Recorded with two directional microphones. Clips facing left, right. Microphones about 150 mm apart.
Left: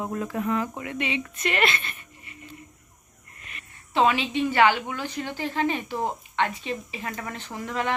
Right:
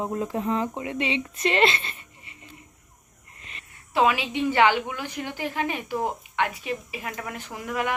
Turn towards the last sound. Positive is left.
turn(degrees=-10)  # may be behind; listen again after turning